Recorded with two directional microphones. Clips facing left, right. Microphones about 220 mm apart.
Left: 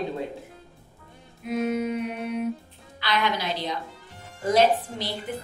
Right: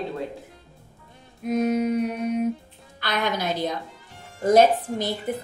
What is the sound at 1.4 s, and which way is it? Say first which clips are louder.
Music: right 4 dB; 40° right (ahead or behind).